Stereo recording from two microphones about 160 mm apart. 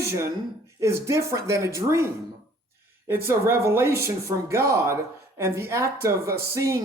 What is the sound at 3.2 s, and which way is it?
Speech, 15° right (ahead or behind).